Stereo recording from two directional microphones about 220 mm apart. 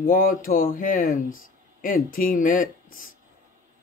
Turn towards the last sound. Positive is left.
turn(degrees=40)  # may be behind; listen again after turning